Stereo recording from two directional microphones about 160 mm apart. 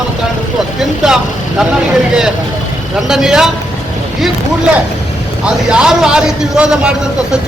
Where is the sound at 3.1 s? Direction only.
5° right (ahead or behind).